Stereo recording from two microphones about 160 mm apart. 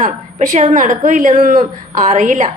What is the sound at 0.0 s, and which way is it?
A woman's voice, 50° right (ahead or behind).